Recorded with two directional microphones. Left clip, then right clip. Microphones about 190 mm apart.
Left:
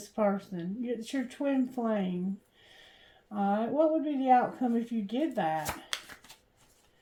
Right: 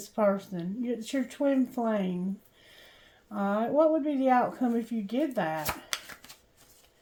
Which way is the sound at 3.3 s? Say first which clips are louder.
Right 1 dB; 45° right (ahead or behind).